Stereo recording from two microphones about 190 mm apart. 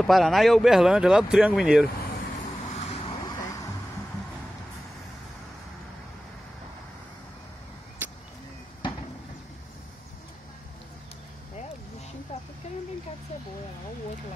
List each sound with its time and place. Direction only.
0.0 s speech: centre (ahead or behind)
3.3 s vehicle: 15° left (ahead or behind)